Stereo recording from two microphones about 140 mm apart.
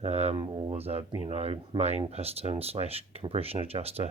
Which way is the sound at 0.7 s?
45° right (ahead or behind).